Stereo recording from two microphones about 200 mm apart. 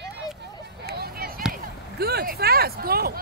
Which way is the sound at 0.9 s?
50° right (ahead or behind).